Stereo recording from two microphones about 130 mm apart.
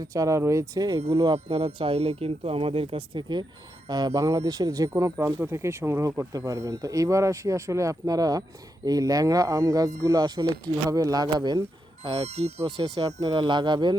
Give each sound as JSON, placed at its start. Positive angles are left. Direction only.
{"t": 0.0, "sound": "speech", "side_deg": -25}
{"t": 12.0, "sound": "speech", "side_deg": -45}
{"t": 12.6, "sound": "speech", "side_deg": -35}